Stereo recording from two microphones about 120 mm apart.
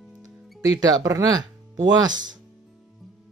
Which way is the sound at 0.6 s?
30° right (ahead or behind).